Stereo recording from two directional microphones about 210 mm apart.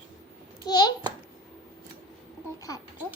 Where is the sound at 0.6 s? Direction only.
20° left (ahead or behind).